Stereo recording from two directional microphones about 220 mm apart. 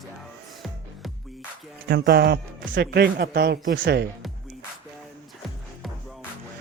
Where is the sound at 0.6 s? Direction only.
Centre (ahead or behind).